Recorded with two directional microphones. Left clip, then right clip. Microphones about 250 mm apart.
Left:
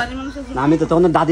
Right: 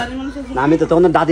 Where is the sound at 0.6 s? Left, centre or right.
Left.